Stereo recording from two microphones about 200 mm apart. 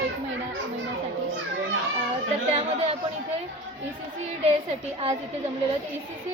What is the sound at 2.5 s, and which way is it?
Speech, 30° right (ahead or behind).